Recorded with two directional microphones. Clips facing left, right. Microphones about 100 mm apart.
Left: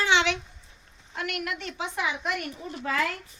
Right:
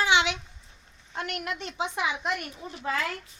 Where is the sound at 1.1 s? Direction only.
25° right (ahead or behind).